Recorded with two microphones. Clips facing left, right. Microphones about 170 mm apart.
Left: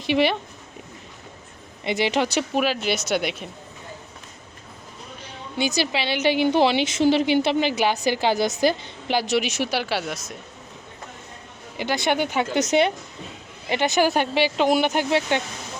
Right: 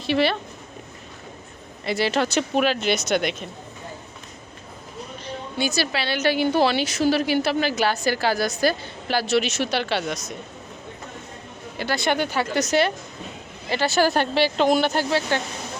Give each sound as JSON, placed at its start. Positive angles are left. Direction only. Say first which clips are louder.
{"t": 0.0, "sound": "speech", "louder": "left 1 dB", "side_deg": 15}
{"t": 1.8, "sound": "a woman's voice", "louder": "even", "side_deg": 20}
{"t": 5.2, "sound": "a woman's voice", "louder": "even", "side_deg": 20}
{"t": 11.8, "sound": "a woman's voice", "louder": "left 1 dB", "side_deg": 15}